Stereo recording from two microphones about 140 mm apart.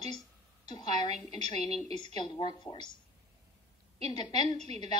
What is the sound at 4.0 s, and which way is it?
Speech, 30° left (ahead or behind).